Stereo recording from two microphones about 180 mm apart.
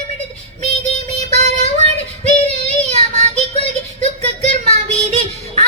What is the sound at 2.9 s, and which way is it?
Child singing, 40° right (ahead or behind).